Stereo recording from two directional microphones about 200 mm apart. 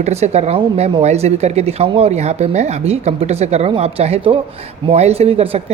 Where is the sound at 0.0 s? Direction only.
30° right (ahead or behind).